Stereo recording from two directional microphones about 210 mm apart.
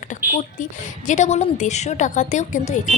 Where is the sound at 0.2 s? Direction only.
45° right (ahead or behind).